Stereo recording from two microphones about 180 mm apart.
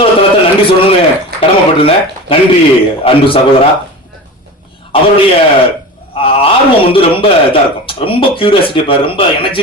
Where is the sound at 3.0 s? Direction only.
30° left (ahead or behind).